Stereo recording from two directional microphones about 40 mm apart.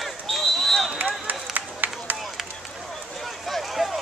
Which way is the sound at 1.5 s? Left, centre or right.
Right.